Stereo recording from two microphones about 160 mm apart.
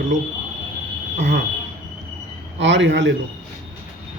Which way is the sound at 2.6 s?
90° right.